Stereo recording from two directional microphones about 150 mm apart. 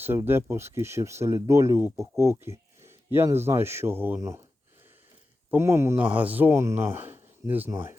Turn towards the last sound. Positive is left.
turn(degrees=-15)  # may be behind; listen again after turning